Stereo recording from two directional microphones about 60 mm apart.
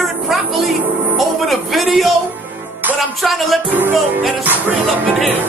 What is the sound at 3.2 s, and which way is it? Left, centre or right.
Speech, centre.